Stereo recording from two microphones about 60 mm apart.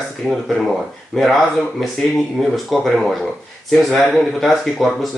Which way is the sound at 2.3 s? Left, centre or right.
Centre.